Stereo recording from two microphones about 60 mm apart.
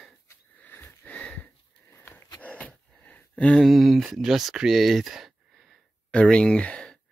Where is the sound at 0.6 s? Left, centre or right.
Left.